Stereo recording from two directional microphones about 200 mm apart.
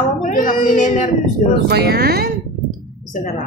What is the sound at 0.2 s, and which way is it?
Speech, 40° left (ahead or behind).